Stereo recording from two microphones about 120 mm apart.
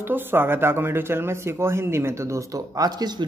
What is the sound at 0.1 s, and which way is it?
Speech, 20° right (ahead or behind).